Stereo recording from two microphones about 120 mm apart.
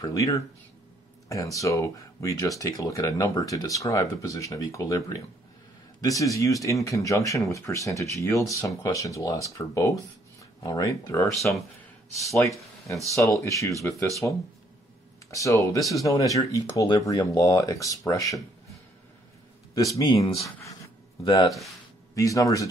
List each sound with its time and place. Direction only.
0.0 s speech: 25° left (ahead or behind)
11.5 s speech: 15° left (ahead or behind)
13.1 s speech: 25° left (ahead or behind)
15.8 s speech: centre (ahead or behind)
16.1 s speech: 30° left (ahead or behind)
19.7 s speech: 30° left (ahead or behind)
21.2 s speech: 45° left (ahead or behind)
21.5 s speech: centre (ahead or behind)
22.1 s speech: 30° left (ahead or behind)